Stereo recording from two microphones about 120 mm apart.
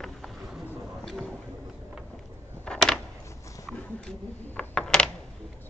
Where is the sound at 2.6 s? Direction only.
5° left (ahead or behind).